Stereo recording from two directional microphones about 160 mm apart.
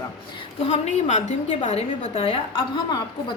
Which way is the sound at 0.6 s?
45° left (ahead or behind).